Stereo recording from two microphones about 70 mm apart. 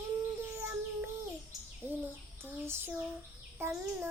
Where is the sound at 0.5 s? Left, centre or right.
Right.